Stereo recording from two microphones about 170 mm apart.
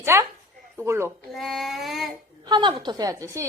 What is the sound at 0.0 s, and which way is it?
A child's voice, 15° right (ahead or behind).